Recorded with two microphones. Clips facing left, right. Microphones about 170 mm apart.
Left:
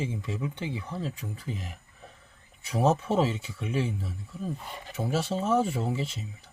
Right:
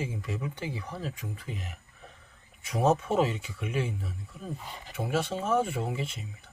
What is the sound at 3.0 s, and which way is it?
Speech, 30° left (ahead or behind).